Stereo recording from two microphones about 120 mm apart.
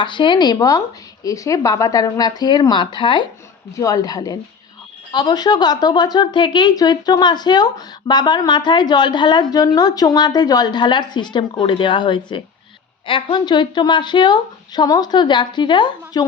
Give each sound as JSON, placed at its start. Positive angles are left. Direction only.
{"t": 0.0, "sound": "speech", "side_deg": 40}
{"t": 3.8, "sound": "speech", "side_deg": 30}